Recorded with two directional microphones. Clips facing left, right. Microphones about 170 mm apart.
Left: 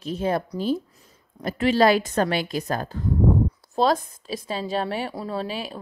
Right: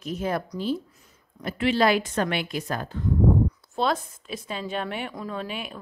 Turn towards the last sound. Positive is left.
turn(degrees=35)  # may be behind; listen again after turning